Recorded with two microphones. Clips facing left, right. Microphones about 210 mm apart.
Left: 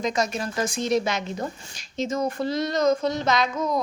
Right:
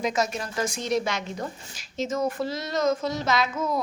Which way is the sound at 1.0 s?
20° left (ahead or behind).